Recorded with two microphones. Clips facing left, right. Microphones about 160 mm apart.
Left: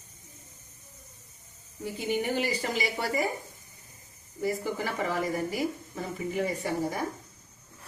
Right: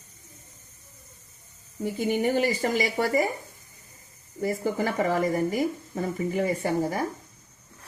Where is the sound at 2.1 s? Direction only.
50° right (ahead or behind).